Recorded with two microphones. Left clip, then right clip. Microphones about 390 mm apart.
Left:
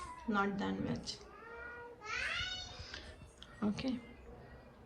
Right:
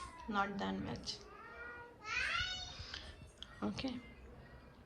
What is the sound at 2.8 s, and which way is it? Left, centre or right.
Music, centre.